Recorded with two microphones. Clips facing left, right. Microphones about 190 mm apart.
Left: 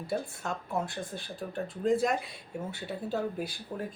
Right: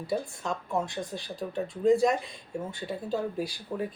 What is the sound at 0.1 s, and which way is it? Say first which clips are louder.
Speech: right 3 dB; centre (ahead or behind).